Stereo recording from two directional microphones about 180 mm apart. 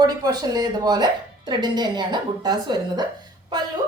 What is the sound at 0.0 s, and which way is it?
A woman's voice, 20° right (ahead or behind).